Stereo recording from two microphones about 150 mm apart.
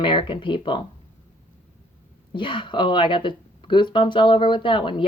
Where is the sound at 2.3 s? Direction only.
35° left (ahead or behind).